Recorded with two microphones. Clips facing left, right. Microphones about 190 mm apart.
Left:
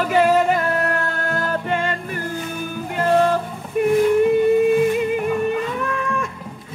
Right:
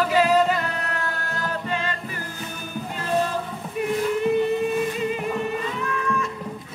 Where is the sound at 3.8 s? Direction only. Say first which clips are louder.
Left 8 dB; 50° left (ahead or behind).